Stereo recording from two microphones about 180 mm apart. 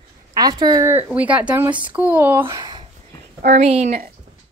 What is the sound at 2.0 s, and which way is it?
Speech, 10° right (ahead or behind).